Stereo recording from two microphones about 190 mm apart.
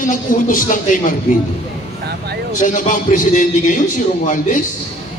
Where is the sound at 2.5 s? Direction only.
45° left (ahead or behind).